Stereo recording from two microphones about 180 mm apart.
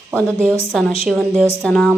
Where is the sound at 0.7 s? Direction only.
Centre (ahead or behind).